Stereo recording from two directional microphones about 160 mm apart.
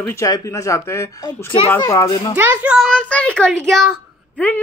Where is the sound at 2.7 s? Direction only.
5° left (ahead or behind).